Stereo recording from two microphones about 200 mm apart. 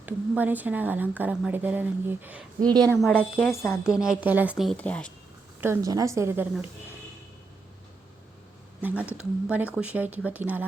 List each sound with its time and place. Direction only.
0.0 s a woman's voice: 10° right (ahead or behind)
3.0 s speech: centre (ahead or behind)
3.8 s a woman's voice: 5° right (ahead or behind)
5.5 s a woman's voice: 15° right (ahead or behind)
8.8 s a woman's voice: 5° right (ahead or behind)